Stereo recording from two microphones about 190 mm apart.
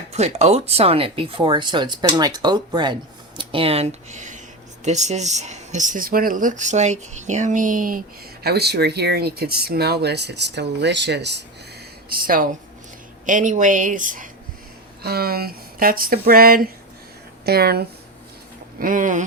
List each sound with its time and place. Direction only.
0.1 s speech: 35° right (ahead or behind)
8.4 s speech: 60° right (ahead or behind)
12.0 s speech: 50° right (ahead or behind)
18.8 s speech: 45° right (ahead or behind)